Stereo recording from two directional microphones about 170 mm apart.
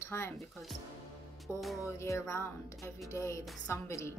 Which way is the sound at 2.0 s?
15° left (ahead or behind).